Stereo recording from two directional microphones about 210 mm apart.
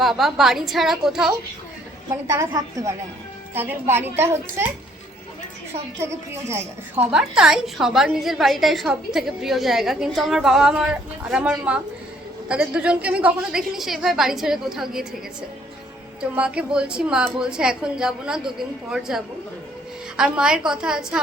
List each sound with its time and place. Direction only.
0.0 s a woman's voice: centre (ahead or behind)
2.2 s a child's voice: 15° right (ahead or behind)
6.0 s a child's voice: 10° right (ahead or behind)